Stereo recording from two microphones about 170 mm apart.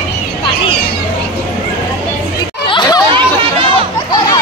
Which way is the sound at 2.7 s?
25° left (ahead or behind).